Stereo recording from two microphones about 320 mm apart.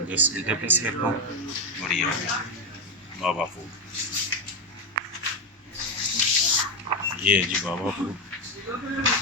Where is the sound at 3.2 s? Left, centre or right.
Centre.